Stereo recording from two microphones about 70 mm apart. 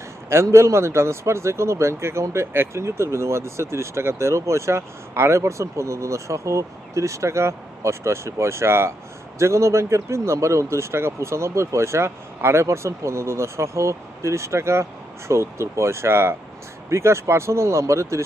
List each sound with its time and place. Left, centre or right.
0.3 s speech: right